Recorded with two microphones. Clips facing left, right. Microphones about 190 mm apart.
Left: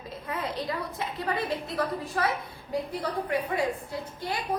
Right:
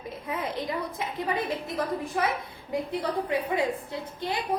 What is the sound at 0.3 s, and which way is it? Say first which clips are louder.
A woman's voice: right 1 dB; 20° right (ahead or behind).